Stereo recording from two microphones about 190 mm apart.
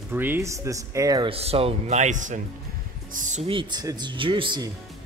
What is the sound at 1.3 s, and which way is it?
Speech, 30° right (ahead or behind).